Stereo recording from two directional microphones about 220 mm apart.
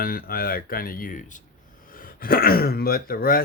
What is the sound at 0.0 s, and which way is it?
Speech, 40° left (ahead or behind).